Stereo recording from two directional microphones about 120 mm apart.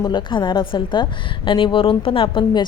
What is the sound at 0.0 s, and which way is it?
A woman's voice, 40° left (ahead or behind).